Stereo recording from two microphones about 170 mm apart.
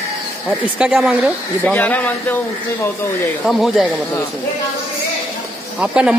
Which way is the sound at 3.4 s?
Centre (ahead or behind).